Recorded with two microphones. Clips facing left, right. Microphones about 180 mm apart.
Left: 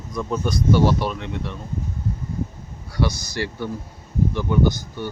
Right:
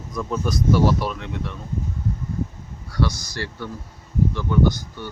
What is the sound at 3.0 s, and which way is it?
Speech, 25° left (ahead or behind).